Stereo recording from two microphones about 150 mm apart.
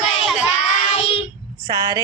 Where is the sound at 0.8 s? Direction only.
45° left (ahead or behind).